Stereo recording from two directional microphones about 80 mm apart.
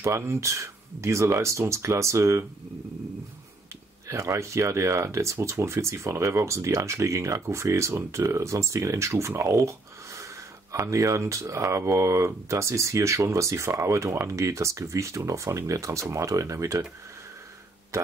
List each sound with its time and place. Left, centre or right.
0.0 s speech: right
4.1 s speech: right
9.3 s a sound: right
10.9 s speech: right
17.9 s speech: right